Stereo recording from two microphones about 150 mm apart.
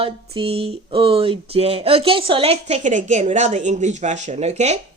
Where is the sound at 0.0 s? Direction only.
40° right (ahead or behind).